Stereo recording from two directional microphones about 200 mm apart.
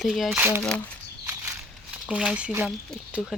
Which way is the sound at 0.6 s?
5° left (ahead or behind).